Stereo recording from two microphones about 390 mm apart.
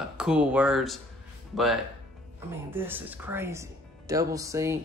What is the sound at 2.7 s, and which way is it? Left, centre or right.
Speech, centre.